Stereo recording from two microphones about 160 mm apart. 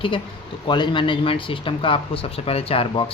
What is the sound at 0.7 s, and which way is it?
Speech, 30° left (ahead or behind).